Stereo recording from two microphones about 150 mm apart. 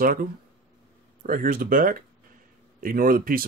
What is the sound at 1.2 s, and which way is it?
Speech, 65° right (ahead or behind).